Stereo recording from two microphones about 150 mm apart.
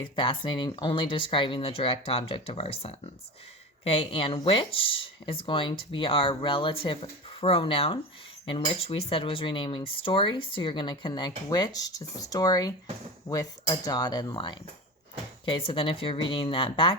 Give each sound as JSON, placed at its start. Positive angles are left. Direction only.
{"t": 0.0, "sound": "speech", "side_deg": 35}